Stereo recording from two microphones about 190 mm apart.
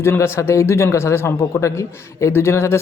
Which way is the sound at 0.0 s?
15° left (ahead or behind).